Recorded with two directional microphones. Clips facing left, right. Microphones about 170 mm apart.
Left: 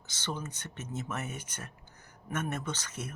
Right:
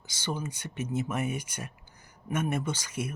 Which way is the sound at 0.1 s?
10° right (ahead or behind).